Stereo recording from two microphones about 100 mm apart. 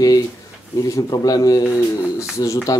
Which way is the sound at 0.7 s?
30° left (ahead or behind).